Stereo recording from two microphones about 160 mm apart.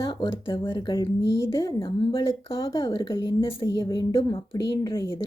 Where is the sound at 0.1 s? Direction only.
30° left (ahead or behind).